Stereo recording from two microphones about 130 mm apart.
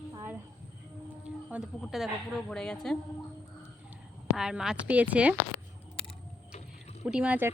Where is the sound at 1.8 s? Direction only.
Centre (ahead or behind).